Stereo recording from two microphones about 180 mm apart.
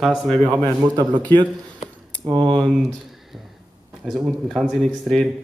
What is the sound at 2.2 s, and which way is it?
Speech, 20° right (ahead or behind).